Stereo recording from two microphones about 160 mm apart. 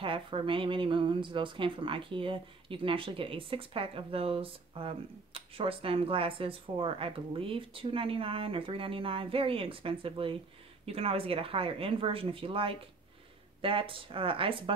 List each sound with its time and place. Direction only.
0.0 s speech: 35° right (ahead or behind)